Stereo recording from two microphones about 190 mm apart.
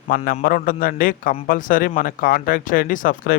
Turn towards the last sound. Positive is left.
turn(degrees=50)  # may be behind; listen again after turning